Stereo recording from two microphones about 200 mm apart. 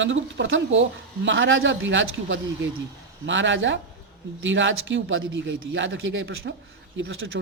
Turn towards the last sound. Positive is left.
turn(degrees=-80)